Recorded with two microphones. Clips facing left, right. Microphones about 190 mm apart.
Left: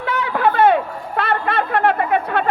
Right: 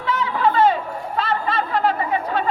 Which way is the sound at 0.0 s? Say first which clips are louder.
Left 2 dB; 60° left (ahead or behind).